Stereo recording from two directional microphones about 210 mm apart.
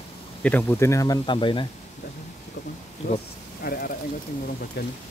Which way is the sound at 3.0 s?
30° left (ahead or behind).